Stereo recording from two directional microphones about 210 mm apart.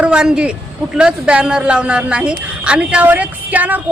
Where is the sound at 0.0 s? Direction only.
5° right (ahead or behind).